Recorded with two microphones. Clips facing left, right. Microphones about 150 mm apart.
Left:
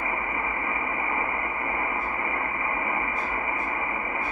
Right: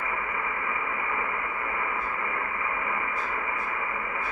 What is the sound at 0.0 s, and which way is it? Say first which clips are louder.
Radio: left 2 dB; 25° left (ahead or behind).